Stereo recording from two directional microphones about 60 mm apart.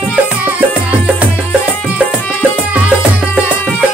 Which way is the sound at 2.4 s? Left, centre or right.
Centre.